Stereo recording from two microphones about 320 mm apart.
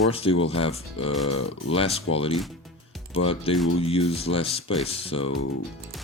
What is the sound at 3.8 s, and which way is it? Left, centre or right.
Speech, centre.